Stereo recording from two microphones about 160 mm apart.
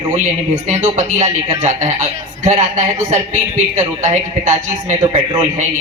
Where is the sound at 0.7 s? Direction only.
45° right (ahead or behind).